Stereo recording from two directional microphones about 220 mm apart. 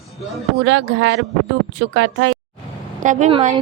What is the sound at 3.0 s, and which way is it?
Speech, 30° right (ahead or behind).